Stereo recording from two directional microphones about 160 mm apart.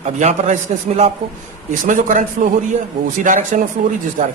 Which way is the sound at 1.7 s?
55° right (ahead or behind).